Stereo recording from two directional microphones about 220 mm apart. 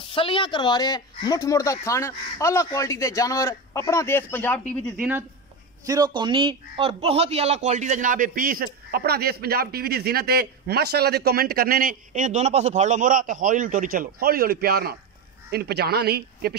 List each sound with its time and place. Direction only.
0.1 s speech: 25° left (ahead or behind); by 4.7 s 10° left (ahead or behind)
5.9 s a man's voice: 20° right (ahead or behind); by 16.5 s 45° right (ahead or behind)